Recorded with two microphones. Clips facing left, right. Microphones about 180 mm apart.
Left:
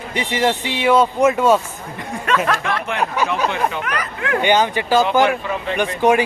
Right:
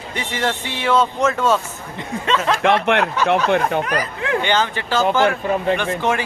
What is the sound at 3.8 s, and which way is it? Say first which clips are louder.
Speech: right 3 dB; 35° right (ahead or behind).